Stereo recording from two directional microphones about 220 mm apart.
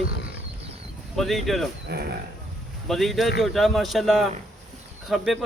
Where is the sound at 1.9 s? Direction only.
45° right (ahead or behind).